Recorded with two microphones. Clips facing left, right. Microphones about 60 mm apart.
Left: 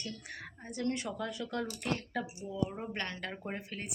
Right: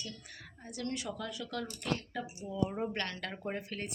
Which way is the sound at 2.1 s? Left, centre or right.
Left.